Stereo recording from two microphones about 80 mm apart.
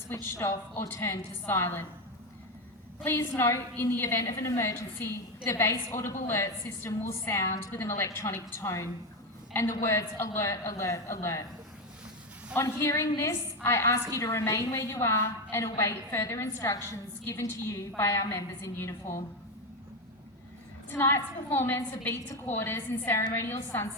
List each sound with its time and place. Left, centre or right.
0.1 s a woman's voice: left
3.0 s a woman's voice: left
12.5 s a woman's voice: left
20.9 s a woman's voice: left